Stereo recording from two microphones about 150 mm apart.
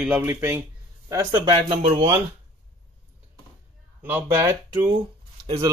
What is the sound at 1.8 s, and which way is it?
Speech, 40° right (ahead or behind).